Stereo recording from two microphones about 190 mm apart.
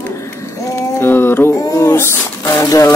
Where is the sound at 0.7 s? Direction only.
15° left (ahead or behind).